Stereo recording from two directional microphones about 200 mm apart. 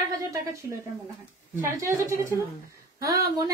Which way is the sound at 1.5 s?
15° right (ahead or behind).